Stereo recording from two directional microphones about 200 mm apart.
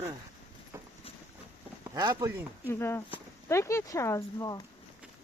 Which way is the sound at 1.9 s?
20° right (ahead or behind).